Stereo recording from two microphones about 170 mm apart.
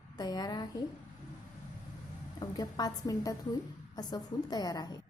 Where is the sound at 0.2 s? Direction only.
25° left (ahead or behind).